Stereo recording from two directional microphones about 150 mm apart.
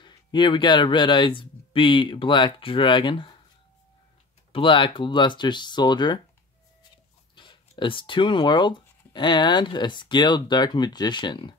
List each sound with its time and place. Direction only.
0.0 s speech: 30° left (ahead or behind)
4.5 s speech: 35° left (ahead or behind)
7.3 s speech: 30° left (ahead or behind)